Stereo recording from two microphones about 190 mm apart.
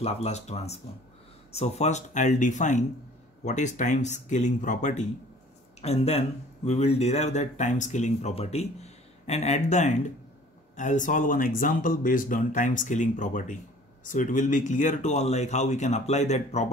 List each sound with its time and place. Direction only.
0.0 s speech: 35° left (ahead or behind)